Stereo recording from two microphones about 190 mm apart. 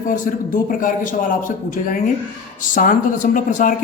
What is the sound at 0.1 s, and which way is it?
Speech, 45° left (ahead or behind).